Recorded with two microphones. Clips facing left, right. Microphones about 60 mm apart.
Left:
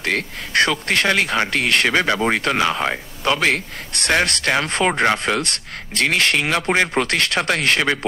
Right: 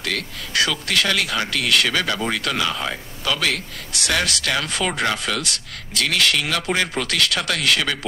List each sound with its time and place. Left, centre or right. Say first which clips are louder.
0.0 s speech: left 4 dB; left